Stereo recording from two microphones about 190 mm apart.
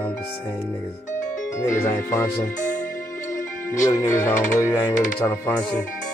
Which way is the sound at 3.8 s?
15° left (ahead or behind).